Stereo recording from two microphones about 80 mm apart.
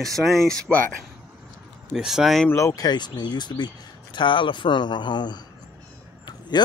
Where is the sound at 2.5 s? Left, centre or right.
Left.